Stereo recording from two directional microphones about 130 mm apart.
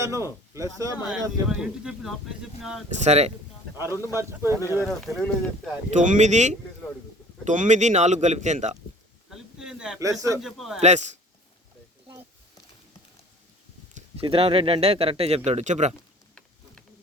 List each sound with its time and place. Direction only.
0.0 s speech: 20° right (ahead or behind)
1.1 s speech: 5° right (ahead or behind)
3.0 s speech: 55° right (ahead or behind)
3.8 s speech: 25° left (ahead or behind)
4.1 s speech: 20° right (ahead or behind)
4.9 s speech: centre (ahead or behind)
5.9 s speech: 70° right (ahead or behind)
7.4 s speech: 75° right (ahead or behind)
9.3 s a sound: 5° right (ahead or behind)
10.0 s speech: 25° right (ahead or behind)
10.4 s speech: centre (ahead or behind)
10.8 s speech: 65° right (ahead or behind)
14.2 s speech: 50° right (ahead or behind)
15.4 s speech: 60° right (ahead or behind)